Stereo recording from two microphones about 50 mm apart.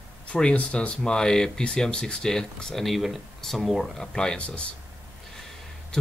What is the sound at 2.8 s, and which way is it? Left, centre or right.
Speech, centre.